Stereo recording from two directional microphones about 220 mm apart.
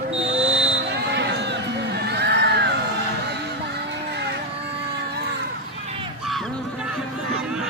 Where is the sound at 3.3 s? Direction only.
50° right (ahead or behind).